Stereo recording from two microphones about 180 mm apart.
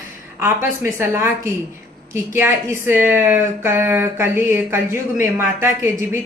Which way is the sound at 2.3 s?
15° right (ahead or behind).